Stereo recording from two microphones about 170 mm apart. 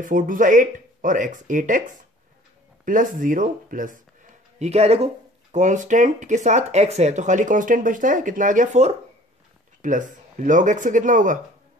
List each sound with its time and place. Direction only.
0.0 s speech: 50° right (ahead or behind)
4.6 s speech: 40° right (ahead or behind)